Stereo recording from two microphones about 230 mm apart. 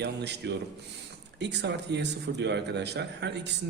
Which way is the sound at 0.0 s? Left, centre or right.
Right.